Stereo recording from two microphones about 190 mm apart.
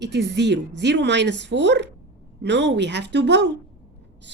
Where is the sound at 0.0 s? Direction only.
65° right (ahead or behind).